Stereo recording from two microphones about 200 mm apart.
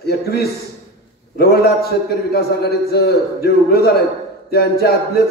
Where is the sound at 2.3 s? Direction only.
50° left (ahead or behind).